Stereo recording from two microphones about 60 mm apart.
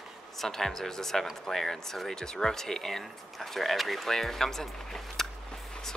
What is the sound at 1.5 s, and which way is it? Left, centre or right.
Speech, centre.